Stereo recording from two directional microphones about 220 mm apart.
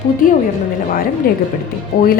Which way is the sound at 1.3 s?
40° left (ahead or behind).